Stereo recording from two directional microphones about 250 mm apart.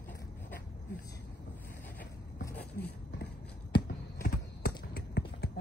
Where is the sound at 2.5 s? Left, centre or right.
Left.